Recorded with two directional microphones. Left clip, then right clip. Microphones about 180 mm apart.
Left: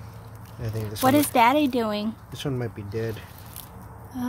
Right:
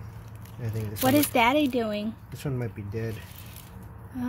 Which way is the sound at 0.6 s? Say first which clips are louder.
Left 4 dB; 5° left (ahead or behind).